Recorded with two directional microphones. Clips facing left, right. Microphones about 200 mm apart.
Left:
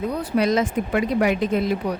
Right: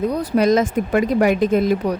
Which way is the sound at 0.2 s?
45° right (ahead or behind).